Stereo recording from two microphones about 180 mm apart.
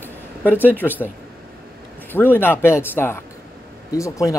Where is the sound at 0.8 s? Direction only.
10° left (ahead or behind).